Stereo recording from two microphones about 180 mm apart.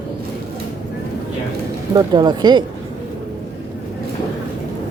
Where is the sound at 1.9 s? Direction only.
25° right (ahead or behind).